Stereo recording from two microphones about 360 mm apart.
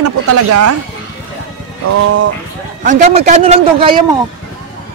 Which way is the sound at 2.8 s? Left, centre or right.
Right.